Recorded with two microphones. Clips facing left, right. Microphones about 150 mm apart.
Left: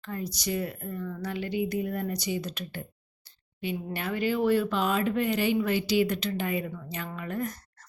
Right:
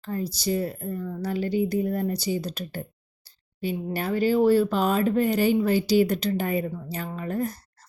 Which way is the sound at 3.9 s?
35° right (ahead or behind).